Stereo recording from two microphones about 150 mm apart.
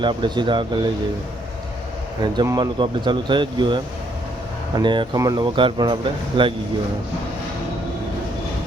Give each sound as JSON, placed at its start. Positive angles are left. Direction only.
{"t": 0.0, "sound": "speech", "side_deg": -30}
{"t": 2.2, "sound": "speech", "side_deg": -30}